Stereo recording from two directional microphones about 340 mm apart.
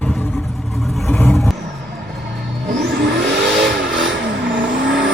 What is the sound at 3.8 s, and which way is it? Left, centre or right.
Vehicle, right.